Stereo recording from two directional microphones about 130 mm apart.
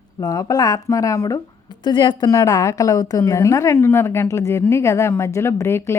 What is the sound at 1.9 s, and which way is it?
Speech, 35° left (ahead or behind).